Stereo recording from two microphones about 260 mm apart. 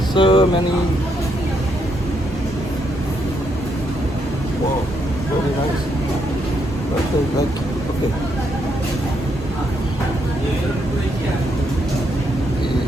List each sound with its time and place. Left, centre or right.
0.1 s speech: centre